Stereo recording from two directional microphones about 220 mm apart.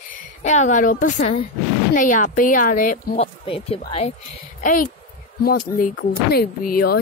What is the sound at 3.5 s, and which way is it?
Speech, 25° left (ahead or behind).